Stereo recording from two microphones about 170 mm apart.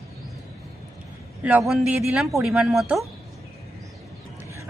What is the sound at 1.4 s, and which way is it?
A woman's voice, 5° right (ahead or behind).